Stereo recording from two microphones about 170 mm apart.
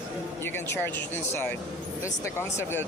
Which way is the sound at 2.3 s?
15° left (ahead or behind).